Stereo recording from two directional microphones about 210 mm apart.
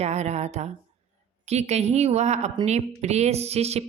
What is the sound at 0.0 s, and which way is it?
Speech, 30° right (ahead or behind).